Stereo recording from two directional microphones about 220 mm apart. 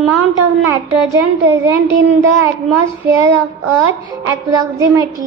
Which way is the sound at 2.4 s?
10° right (ahead or behind).